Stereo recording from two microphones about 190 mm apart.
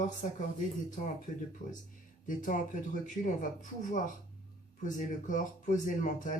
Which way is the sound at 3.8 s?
40° left (ahead or behind).